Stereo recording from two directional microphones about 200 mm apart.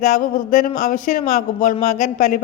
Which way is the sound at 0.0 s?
40° left (ahead or behind).